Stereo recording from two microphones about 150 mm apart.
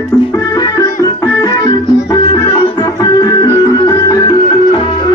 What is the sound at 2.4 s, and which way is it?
Music, 40° left (ahead or behind).